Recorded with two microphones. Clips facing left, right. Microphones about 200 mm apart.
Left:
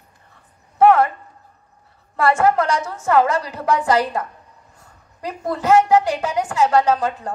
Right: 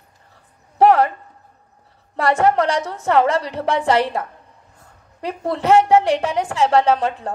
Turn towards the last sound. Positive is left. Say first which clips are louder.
# right 1 dB
turn(degrees=-35)  # may be behind; listen again after turning